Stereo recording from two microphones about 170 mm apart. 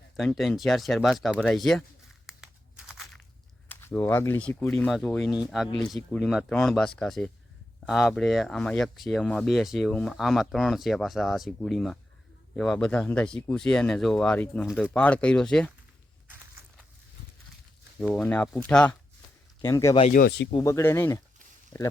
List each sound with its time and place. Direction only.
0.2 s speech: centre (ahead or behind)
2.2 s crumpling: 5° right (ahead or behind)
3.7 s speech: 10° left (ahead or behind)
5.6 s speech: 25° left (ahead or behind)
6.1 s speech: centre (ahead or behind)
18.0 s speech: 5° left (ahead or behind)
19.6 s speech: 20° left (ahead or behind)
20.1 s speech: 80° left
20.6 s speech: 20° left (ahead or behind)